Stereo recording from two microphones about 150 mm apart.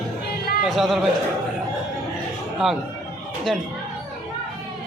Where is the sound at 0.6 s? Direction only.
Centre (ahead or behind).